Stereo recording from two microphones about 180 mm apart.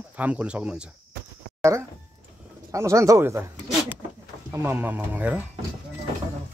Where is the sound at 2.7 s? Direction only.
15° right (ahead or behind).